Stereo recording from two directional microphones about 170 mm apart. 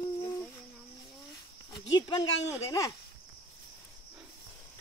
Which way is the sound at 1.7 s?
25° left (ahead or behind).